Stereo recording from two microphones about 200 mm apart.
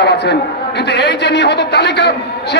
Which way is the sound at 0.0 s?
55° left (ahead or behind).